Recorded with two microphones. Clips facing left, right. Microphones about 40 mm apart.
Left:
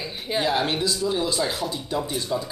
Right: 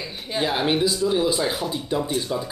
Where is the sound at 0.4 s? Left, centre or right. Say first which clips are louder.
Right 2 dB; centre.